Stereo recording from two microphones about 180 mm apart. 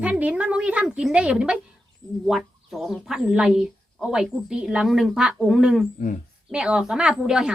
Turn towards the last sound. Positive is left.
turn(degrees=-5)  # may be behind; listen again after turning